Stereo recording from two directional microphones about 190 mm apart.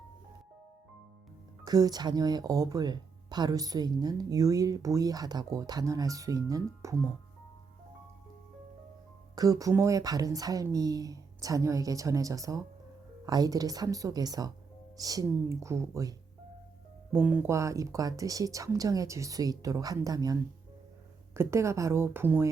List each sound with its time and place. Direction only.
1.6 s speech: 20° right (ahead or behind)
9.3 s speech: 20° right (ahead or behind)